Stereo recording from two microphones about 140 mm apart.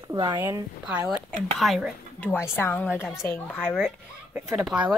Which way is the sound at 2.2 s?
15° left (ahead or behind).